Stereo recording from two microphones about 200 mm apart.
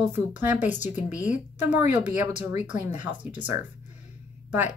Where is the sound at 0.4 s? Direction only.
10° right (ahead or behind).